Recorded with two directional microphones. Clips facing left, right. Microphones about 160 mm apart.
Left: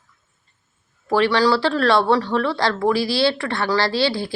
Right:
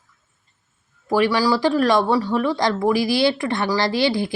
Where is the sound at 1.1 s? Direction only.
10° right (ahead or behind).